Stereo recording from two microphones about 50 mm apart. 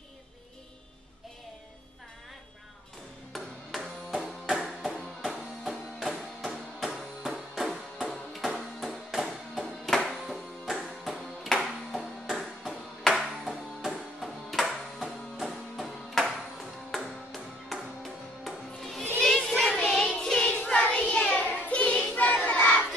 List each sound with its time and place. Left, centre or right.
3.3 s music: centre
19.2 s child singing: centre
20.1 s music: centre
20.4 s child singing: left
21.5 s child singing: left
21.7 s child singing: left